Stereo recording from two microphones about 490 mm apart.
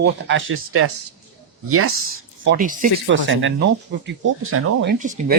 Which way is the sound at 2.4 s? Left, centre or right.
Centre.